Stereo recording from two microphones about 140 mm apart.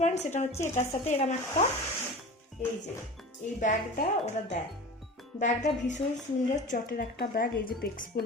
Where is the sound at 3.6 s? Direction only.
60° left (ahead or behind).